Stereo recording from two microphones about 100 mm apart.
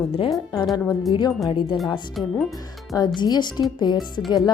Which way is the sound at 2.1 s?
Centre (ahead or behind).